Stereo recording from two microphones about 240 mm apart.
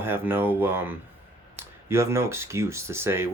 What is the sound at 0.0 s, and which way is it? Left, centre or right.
Speech, centre.